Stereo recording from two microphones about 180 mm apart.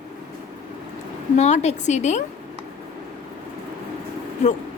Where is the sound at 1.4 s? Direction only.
40° left (ahead or behind).